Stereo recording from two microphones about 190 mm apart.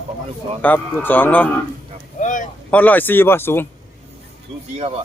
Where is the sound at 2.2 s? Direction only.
45° left (ahead or behind).